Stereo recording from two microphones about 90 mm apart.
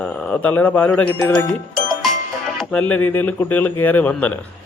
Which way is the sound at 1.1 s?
25° left (ahead or behind).